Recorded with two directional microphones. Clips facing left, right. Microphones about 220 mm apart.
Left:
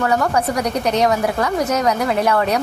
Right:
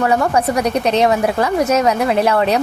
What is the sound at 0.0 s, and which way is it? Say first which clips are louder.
A woman's voice: right 3 dB; 25° right (ahead or behind).